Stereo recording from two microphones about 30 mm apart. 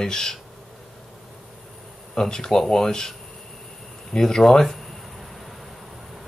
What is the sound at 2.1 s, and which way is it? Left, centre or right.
Speech, left.